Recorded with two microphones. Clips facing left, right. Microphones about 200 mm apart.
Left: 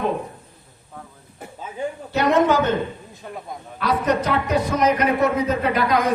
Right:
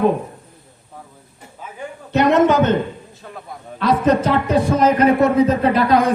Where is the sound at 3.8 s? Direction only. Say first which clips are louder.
Right 5 dB; 30° right (ahead or behind).